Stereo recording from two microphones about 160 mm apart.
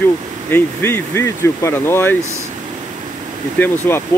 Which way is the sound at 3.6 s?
15° left (ahead or behind).